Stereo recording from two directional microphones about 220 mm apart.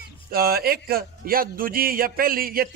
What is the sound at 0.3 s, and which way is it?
A man's voice, 45° right (ahead or behind).